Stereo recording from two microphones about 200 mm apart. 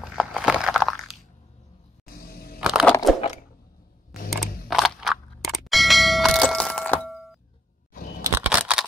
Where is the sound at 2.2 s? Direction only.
50° left (ahead or behind).